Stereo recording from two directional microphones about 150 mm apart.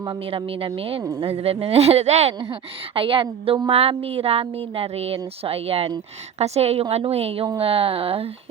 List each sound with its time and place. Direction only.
0.0 s a woman's voice: 30° right (ahead or behind); by 2.3 s 45° right (ahead or behind)
2.4 s a woman's voice: 35° right (ahead or behind)